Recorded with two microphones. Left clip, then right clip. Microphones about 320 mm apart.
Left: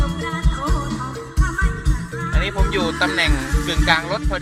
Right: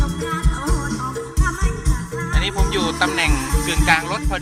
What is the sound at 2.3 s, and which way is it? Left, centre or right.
Music, centre.